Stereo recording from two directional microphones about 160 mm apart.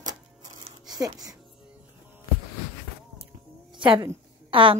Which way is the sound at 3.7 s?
30° right (ahead or behind).